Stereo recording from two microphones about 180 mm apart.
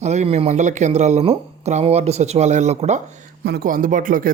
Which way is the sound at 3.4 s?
60° right (ahead or behind).